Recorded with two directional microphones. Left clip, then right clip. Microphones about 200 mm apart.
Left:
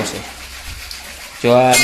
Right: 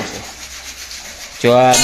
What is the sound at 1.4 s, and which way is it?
Speech, 15° right (ahead or behind).